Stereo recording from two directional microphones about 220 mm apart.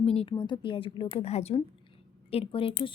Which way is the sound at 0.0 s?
25° left (ahead or behind).